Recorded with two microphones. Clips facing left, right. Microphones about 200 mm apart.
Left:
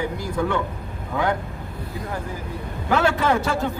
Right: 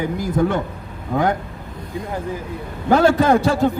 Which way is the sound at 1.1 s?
45° right (ahead or behind).